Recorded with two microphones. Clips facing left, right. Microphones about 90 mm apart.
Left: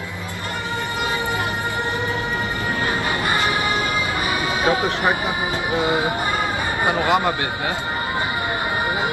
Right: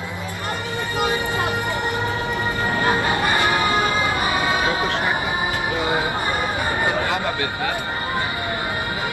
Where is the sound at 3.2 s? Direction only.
25° left (ahead or behind).